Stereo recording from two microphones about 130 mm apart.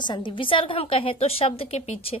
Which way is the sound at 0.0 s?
35° left (ahead or behind).